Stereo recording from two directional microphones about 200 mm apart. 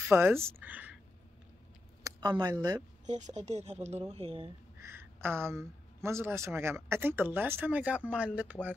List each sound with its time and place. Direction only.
0.1 s speech: 10° right (ahead or behind)
2.0 s speech: 20° right (ahead or behind)
3.1 s a woman's voice: 35° right (ahead or behind)
4.7 s speech: 10° right (ahead or behind)